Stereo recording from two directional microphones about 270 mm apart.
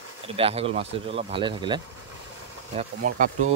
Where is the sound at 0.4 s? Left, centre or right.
Right.